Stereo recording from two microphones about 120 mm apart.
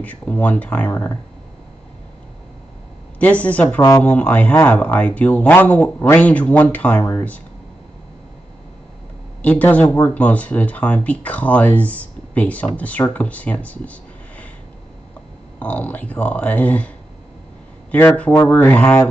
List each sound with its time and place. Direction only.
0.0 s speech: 10° left (ahead or behind)
3.2 s speech: 10° left (ahead or behind)
9.4 s speech: 10° left (ahead or behind)
15.6 s speech: 10° left (ahead or behind)
17.9 s speech: 15° left (ahead or behind)